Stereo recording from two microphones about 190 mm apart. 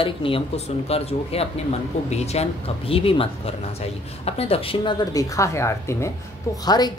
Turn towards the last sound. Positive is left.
turn(degrees=20)  # may be behind; listen again after turning